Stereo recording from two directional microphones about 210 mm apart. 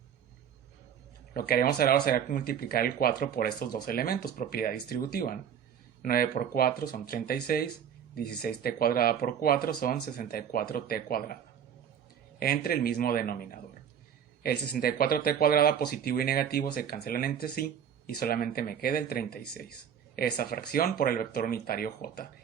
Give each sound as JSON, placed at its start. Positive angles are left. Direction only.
{"t": 1.3, "sound": "speech", "side_deg": 45}
{"t": 12.4, "sound": "speech", "side_deg": 45}